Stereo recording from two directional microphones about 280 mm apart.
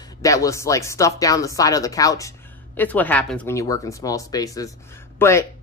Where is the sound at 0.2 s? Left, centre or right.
Centre.